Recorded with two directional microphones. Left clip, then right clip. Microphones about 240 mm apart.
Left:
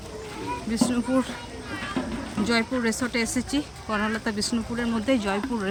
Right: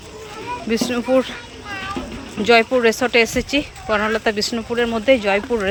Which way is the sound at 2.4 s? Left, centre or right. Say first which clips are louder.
Right 12 dB; centre.